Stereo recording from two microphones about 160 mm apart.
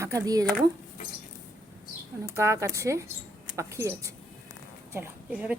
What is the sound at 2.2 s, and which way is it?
Speech, 15° right (ahead or behind).